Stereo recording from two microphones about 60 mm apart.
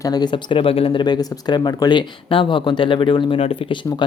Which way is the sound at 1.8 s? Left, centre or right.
Left.